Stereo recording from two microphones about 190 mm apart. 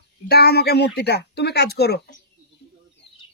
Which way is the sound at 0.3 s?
55° left (ahead or behind).